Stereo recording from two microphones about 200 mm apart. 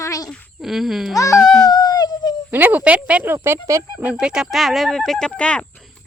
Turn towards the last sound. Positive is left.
turn(degrees=5)  # may be behind; listen again after turning